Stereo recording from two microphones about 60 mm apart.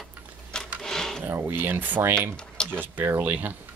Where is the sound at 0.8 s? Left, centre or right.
Centre.